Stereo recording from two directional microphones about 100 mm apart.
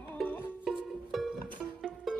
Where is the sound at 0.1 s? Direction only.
15° left (ahead or behind).